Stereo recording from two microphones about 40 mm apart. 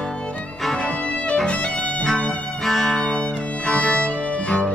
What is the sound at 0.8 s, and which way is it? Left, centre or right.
Violin, left.